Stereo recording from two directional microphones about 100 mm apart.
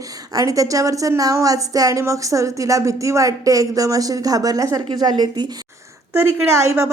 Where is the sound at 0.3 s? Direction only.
35° right (ahead or behind).